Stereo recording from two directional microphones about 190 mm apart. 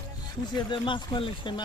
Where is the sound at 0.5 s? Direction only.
25° left (ahead or behind).